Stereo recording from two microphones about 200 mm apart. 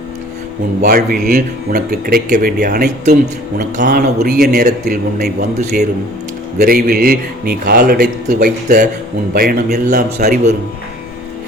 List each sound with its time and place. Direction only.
0.8 s a man's voice: 45° right (ahead or behind)
3.6 s a man's voice: 40° right (ahead or behind)
6.6 s a man's voice: 45° right (ahead or behind)
9.8 s a man's voice: 35° right (ahead or behind)